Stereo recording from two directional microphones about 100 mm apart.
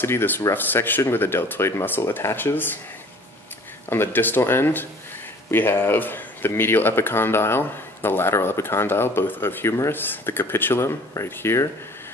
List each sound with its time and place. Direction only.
0.0 s speech: 20° left (ahead or behind)
3.9 s speech: 20° left (ahead or behind)